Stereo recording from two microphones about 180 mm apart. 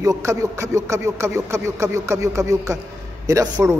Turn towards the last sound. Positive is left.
turn(degrees=-20)  # may be behind; listen again after turning